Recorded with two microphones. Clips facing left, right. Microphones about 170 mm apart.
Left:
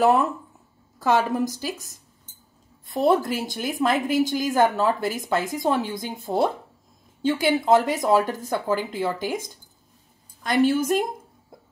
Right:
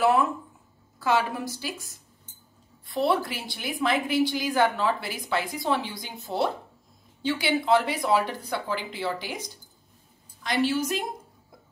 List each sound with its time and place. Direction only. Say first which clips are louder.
0.9 s a woman's voice: left 4 dB; 40° left (ahead or behind)
2.9 s a woman's voice: left 5 dB; 45° left (ahead or behind)